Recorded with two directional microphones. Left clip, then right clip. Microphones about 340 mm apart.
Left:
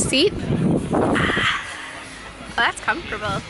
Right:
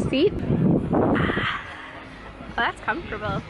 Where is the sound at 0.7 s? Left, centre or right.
Centre.